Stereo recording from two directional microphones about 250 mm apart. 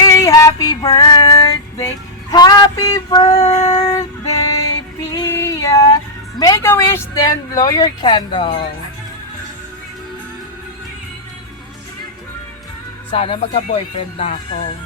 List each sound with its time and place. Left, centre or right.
0.0 s female singing: centre
2.3 s a sound: centre
5.1 s female singing: centre
6.4 s a woman's voice: centre
13.1 s speech: left